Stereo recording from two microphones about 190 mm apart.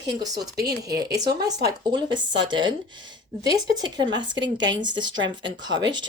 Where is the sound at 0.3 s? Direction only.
55° right (ahead or behind).